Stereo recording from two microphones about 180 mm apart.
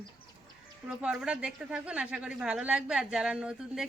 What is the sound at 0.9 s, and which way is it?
A woman's voice, 5° right (ahead or behind).